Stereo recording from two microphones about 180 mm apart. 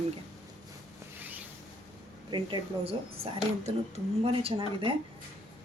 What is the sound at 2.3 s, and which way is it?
Speech, 25° right (ahead or behind).